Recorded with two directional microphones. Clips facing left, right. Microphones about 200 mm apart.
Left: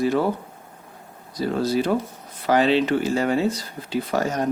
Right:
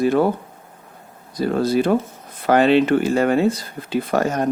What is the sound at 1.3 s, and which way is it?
Speech, 55° right (ahead or behind).